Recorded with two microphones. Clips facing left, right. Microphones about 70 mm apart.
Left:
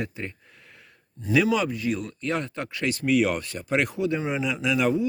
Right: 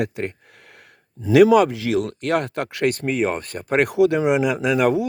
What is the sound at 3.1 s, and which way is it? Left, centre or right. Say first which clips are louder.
Speech: even; right.